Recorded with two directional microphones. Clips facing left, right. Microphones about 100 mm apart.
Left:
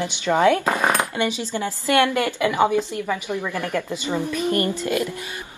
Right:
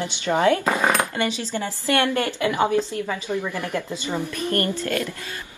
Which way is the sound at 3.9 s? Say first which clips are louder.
Left 3 dB; 15° left (ahead or behind).